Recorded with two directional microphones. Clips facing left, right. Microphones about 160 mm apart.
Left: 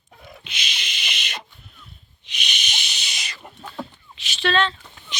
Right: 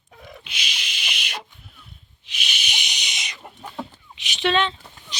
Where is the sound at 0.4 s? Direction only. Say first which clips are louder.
Left 2 dB; 10° right (ahead or behind).